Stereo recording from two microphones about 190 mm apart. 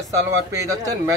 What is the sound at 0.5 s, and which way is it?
Speech, 15° right (ahead or behind).